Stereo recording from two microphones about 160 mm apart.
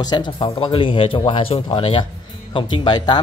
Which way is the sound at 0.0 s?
25° left (ahead or behind).